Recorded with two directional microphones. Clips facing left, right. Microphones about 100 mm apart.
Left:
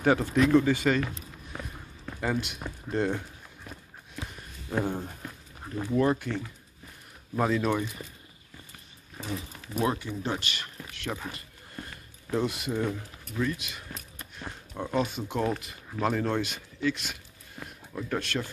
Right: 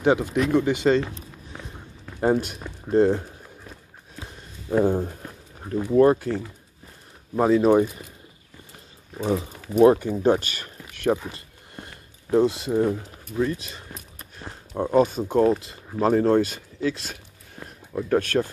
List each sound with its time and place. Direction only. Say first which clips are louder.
0.0 s speech: right 2 dB; 20° right (ahead or behind)
2.1 s speech: right 9 dB; 35° right (ahead or behind)
4.8 s speech: right 9 dB; 25° right (ahead or behind)
5.9 s speech: right 8 dB; 40° right (ahead or behind)
9.2 s speech: right 12 dB; 35° right (ahead or behind)
12.3 s speech: right 9 dB; 30° right (ahead or behind)
18.0 s speech: right 10 dB; 50° right (ahead or behind)